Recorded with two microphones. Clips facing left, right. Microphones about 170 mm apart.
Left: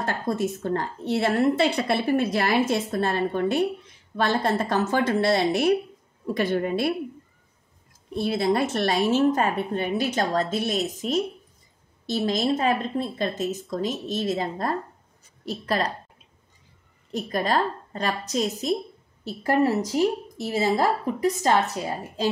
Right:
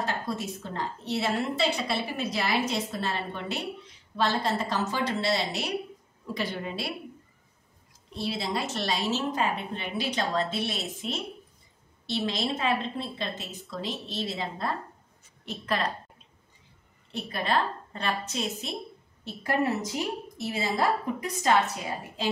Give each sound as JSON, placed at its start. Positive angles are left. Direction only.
{"t": 0.0, "sound": "a woman's voice", "side_deg": 50}
{"t": 8.1, "sound": "a woman's voice", "side_deg": 55}
{"t": 17.1, "sound": "a woman's voice", "side_deg": 40}